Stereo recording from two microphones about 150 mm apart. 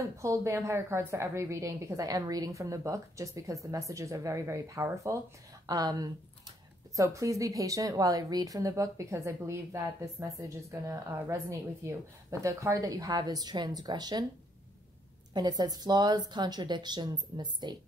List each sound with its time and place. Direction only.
0.2 s a woman's voice: 20° right (ahead or behind)
15.3 s a woman's voice: 25° right (ahead or behind)